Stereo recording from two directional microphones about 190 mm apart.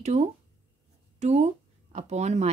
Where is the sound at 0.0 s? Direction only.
35° right (ahead or behind).